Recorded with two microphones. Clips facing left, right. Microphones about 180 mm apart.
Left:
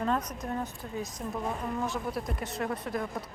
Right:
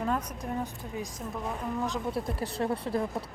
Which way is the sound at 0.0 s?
10° right (ahead or behind).